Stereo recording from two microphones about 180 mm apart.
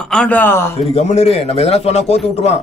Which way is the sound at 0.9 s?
35° left (ahead or behind).